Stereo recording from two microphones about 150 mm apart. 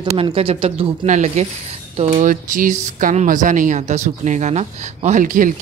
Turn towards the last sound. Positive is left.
turn(degrees=-60)  # may be behind; listen again after turning